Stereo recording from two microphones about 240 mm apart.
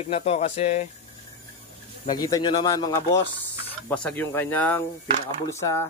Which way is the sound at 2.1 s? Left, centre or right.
Centre.